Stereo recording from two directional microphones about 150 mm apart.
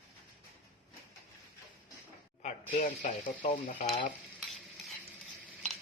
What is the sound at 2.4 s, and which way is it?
Speech, 55° left (ahead or behind).